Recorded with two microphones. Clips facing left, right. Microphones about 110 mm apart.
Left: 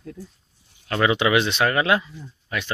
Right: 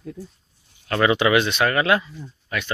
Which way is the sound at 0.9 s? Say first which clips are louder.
Right 2 dB; 10° left (ahead or behind).